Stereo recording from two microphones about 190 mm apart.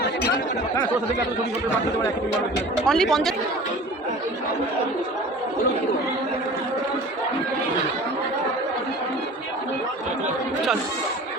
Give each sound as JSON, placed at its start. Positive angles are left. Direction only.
{"t": 2.8, "sound": "speech", "side_deg": 0}